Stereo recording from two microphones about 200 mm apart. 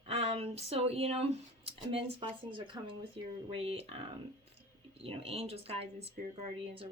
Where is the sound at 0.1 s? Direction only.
30° right (ahead or behind).